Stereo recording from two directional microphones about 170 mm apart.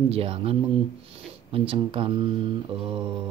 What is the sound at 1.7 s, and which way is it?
Speech, 30° right (ahead or behind).